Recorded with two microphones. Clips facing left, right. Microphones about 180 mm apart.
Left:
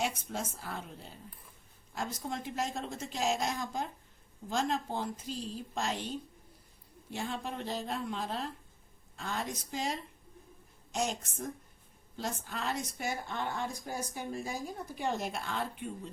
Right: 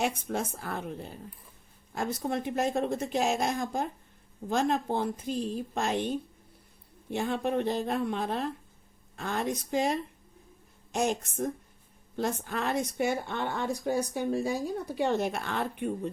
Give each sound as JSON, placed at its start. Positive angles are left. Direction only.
{"t": 0.0, "sound": "speech", "side_deg": -60}